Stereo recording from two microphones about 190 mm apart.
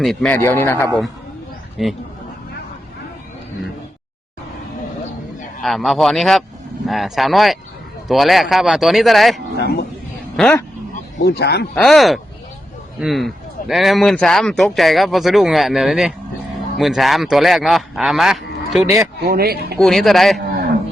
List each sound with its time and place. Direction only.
0.0 s speech: centre (ahead or behind)
0.3 s a man's voice: 15° left (ahead or behind)
1.8 s speech: centre (ahead or behind)
5.6 s speech: centre (ahead or behind)
11.2 s speech: 55° left (ahead or behind)
11.7 s speech: centre (ahead or behind)
19.2 s speech: 55° right (ahead or behind)
19.8 s speech: centre (ahead or behind)